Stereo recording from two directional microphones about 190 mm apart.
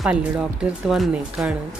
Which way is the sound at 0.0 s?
5° right (ahead or behind).